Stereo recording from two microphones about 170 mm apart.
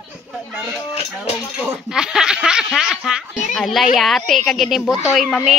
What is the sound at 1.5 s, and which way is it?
Speech, 5° right (ahead or behind).